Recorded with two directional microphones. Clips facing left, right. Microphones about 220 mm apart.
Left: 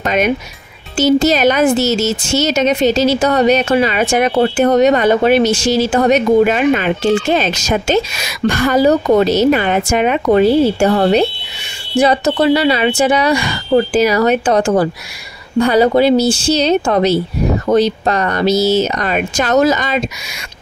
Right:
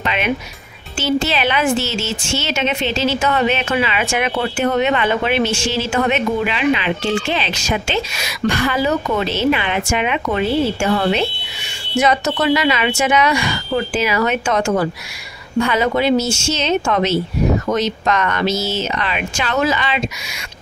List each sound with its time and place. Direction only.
0.0 s speech: 45° left (ahead or behind)